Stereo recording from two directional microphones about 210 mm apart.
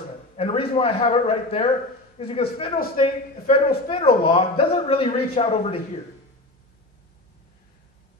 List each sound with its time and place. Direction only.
0.4 s a man's voice: 25° left (ahead or behind)